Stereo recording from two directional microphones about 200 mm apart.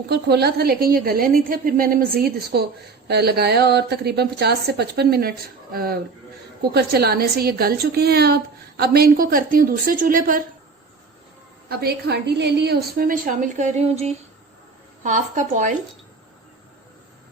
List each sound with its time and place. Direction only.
0.1 s a woman's voice: 55° right (ahead or behind)
11.7 s a woman's voice: 50° right (ahead or behind)
15.0 s a woman's voice: 40° right (ahead or behind)